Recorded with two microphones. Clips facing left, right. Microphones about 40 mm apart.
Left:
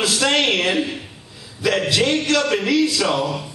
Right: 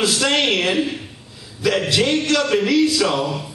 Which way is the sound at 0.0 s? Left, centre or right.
Centre.